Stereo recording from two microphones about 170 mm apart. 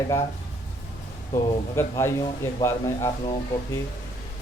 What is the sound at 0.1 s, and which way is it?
Speech, 15° left (ahead or behind).